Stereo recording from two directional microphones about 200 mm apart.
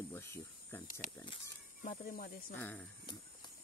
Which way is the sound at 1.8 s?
45° left (ahead or behind).